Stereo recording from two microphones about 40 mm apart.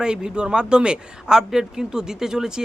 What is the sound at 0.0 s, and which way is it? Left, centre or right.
Speech, right.